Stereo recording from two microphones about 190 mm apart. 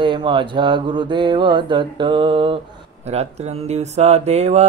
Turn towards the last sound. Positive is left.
turn(degrees=-35)  # may be behind; listen again after turning